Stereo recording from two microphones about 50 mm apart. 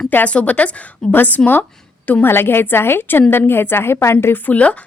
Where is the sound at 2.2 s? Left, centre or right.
Left.